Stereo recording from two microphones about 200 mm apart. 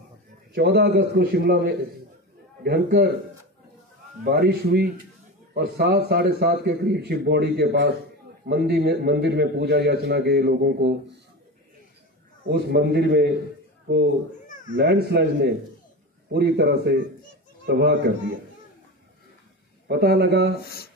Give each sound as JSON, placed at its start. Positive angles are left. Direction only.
{"t": 0.6, "sound": "a man's voice", "side_deg": -55}
{"t": 4.2, "sound": "a man's voice", "side_deg": -50}
{"t": 12.4, "sound": "a man's voice", "side_deg": -55}
{"t": 14.5, "sound": "cat", "side_deg": 40}
{"t": 14.8, "sound": "a man's voice", "side_deg": -55}
{"t": 19.9, "sound": "a man's voice", "side_deg": -55}
{"t": 20.6, "sound": "speech", "side_deg": 50}